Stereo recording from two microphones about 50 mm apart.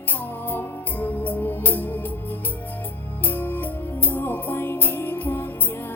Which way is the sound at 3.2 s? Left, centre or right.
Left.